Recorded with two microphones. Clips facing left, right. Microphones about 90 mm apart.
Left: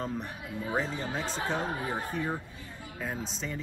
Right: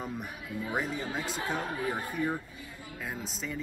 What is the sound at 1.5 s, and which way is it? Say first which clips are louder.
Speech: even; 25° left (ahead or behind).